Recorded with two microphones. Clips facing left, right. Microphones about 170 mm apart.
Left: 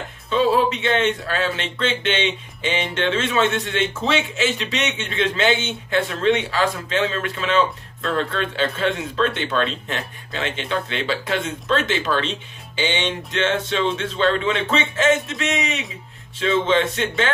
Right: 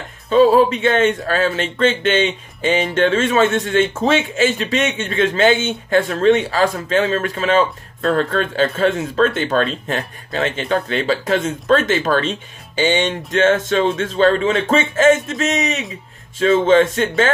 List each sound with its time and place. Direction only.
0.3 s speech: 45° right (ahead or behind)